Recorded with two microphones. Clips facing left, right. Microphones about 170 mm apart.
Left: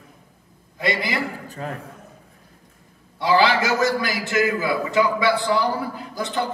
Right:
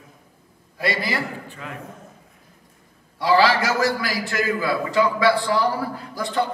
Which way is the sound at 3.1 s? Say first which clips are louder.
Even; 20° left (ahead or behind).